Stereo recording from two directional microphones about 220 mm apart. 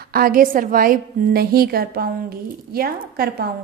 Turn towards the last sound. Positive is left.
turn(degrees=-45)  # may be behind; listen again after turning